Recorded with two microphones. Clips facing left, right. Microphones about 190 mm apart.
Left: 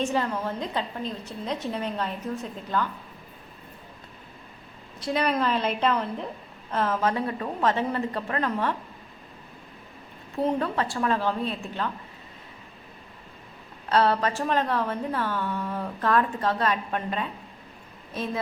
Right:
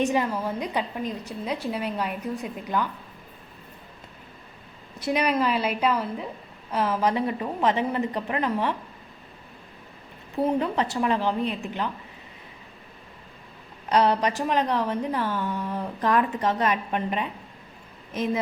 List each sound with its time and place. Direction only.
0.0 s a woman's voice: 15° right (ahead or behind)
5.0 s a woman's voice: 10° right (ahead or behind)
10.4 s a woman's voice: 15° right (ahead or behind)
13.9 s a woman's voice: 15° right (ahead or behind)